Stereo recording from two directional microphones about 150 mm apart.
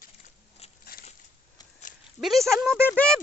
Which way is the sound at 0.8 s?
80° left.